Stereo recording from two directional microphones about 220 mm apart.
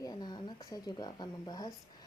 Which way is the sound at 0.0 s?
20° left (ahead or behind).